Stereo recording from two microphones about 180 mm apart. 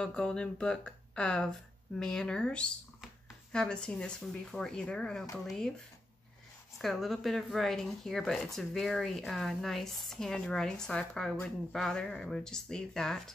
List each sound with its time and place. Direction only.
0.0 s speech: 5° left (ahead or behind)
6.8 s speech: centre (ahead or behind)